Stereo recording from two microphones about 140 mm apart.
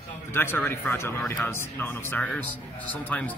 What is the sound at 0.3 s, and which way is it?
Speech, 15° left (ahead or behind).